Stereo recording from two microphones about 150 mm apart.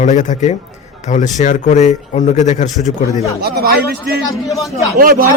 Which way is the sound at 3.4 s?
90° right.